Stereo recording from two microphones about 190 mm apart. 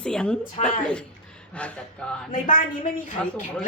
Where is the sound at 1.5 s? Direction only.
5° left (ahead or behind).